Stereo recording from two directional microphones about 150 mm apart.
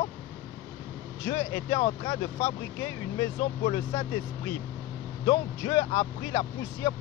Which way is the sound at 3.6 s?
35° left (ahead or behind).